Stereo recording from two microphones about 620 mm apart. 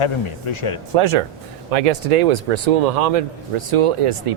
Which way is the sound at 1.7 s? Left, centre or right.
Right.